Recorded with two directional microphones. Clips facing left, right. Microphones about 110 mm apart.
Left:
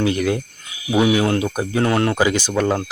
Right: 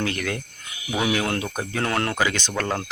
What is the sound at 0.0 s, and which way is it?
Speech, 15° left (ahead or behind).